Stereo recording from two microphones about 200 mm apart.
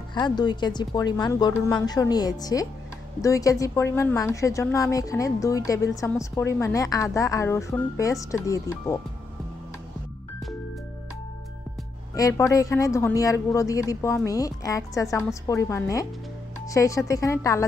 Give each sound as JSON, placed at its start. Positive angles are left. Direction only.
{"t": 0.1, "sound": "a woman's voice", "side_deg": 20}
{"t": 12.2, "sound": "a woman's voice", "side_deg": 15}